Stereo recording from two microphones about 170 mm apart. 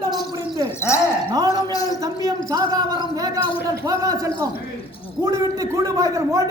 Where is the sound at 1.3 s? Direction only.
20° right (ahead or behind).